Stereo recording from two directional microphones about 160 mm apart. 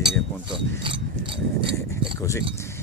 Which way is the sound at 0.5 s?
30° right (ahead or behind).